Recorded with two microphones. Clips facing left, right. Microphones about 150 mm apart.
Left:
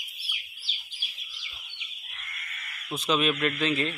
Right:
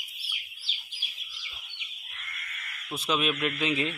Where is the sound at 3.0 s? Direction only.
5° right (ahead or behind).